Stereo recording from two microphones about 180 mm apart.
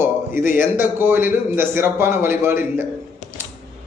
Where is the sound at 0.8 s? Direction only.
10° right (ahead or behind).